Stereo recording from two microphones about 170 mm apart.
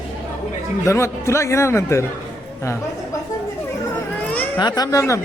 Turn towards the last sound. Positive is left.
turn(degrees=20)  # may be behind; listen again after turning